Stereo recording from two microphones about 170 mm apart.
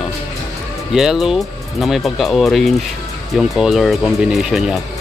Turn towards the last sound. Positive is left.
turn(degrees=0)  # may be behind; listen again after turning